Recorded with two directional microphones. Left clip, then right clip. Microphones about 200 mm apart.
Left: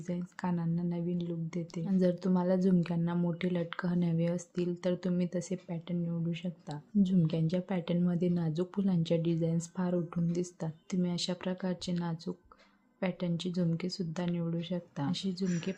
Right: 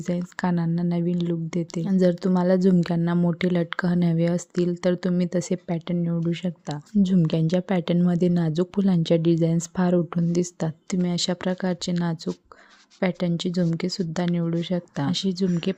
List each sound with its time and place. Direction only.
0.1 s speech: 45° right (ahead or behind)